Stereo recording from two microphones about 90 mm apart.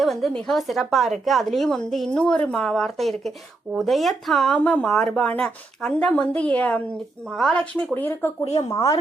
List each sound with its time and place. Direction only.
0.0 s a woman's voice: centre (ahead or behind)
6.9 s a woman's voice: centre (ahead or behind)
7.6 s speech: 15° left (ahead or behind)
8.7 s a woman's voice: 40° left (ahead or behind)